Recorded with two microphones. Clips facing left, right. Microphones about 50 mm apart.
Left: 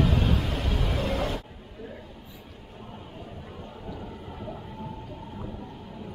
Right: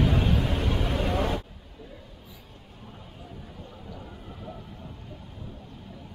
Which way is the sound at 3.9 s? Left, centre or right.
Centre.